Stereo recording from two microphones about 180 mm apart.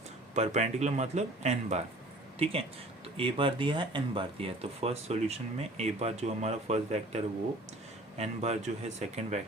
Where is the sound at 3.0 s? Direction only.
30° right (ahead or behind).